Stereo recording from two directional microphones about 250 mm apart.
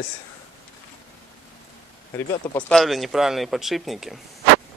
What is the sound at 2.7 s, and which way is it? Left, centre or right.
Speech, centre.